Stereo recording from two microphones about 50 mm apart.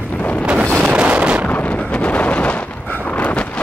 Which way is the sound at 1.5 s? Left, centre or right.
Left.